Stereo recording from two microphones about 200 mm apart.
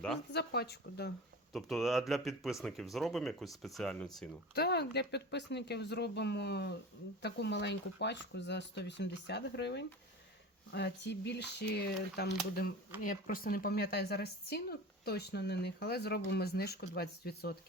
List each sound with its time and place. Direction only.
0.3 s a woman's voice: 55° left (ahead or behind)
1.5 s speech: centre (ahead or behind)
4.5 s speech: 55° left (ahead or behind)
13.0 s a woman's voice: 45° left (ahead or behind)